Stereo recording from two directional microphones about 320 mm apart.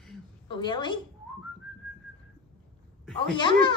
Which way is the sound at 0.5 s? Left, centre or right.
Centre.